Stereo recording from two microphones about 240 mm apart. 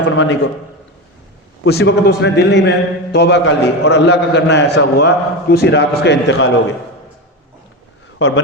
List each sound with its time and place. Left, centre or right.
0.0 s a man's voice: left
1.6 s a man's voice: left